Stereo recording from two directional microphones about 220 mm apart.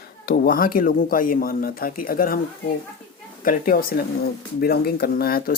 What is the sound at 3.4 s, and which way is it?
Speech, 40° left (ahead or behind).